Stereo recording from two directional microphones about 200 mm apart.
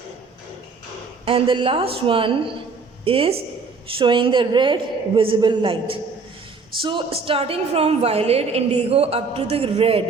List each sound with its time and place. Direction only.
1.2 s a woman's voice: 25° right (ahead or behind)